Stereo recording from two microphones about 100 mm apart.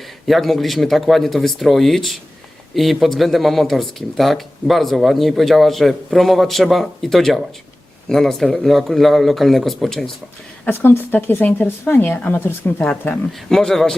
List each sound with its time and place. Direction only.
0.3 s speech: centre (ahead or behind)
10.7 s speech: 20° left (ahead or behind)
13.5 s speech: 5° left (ahead or behind)